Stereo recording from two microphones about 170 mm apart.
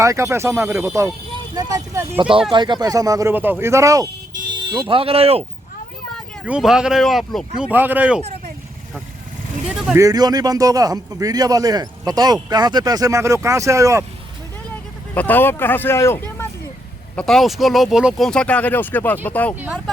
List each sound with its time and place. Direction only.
0.0 s a man's voice: 15° right (ahead or behind); by 5.5 s 35° right (ahead or behind)
6.4 s speech: 5° right (ahead or behind)
9.6 s speech: 5° right (ahead or behind)
10.0 s a man's voice: 20° right (ahead or behind)
15.1 s speech: 10° left (ahead or behind)
17.2 s speech: centre (ahead or behind)
19.5 s speech: 10° right (ahead or behind)